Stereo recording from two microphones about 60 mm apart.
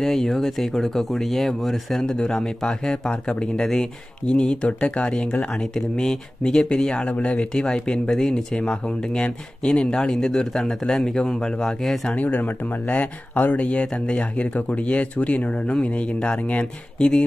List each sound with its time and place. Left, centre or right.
0.0 s speech: centre
12.1 s speech: left